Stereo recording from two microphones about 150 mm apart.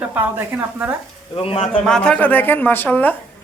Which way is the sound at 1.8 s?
5° left (ahead or behind).